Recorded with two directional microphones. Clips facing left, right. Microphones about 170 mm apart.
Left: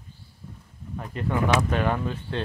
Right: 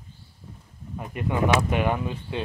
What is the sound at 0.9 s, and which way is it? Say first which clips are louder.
Speech: even; 10° right (ahead or behind).